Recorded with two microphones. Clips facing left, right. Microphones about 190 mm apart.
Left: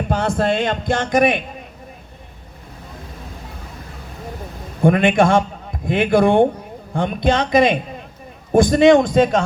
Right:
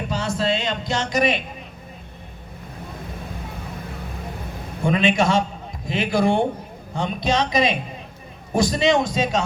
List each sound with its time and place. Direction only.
0.1 s speech: 55° left (ahead or behind)
4.8 s a man's voice: 55° left (ahead or behind)